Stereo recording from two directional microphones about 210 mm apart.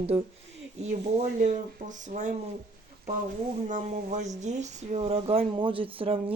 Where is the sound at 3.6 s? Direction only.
35° right (ahead or behind).